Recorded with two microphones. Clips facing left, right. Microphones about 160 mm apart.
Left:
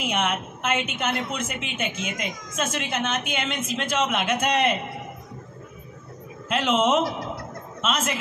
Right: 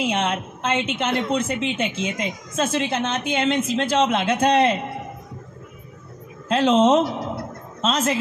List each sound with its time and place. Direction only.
0.0 s a woman's voice: 30° right (ahead or behind)
6.5 s a woman's voice: 35° right (ahead or behind)